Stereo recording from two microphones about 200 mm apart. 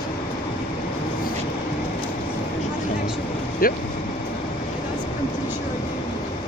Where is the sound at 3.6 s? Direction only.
45° left (ahead or behind).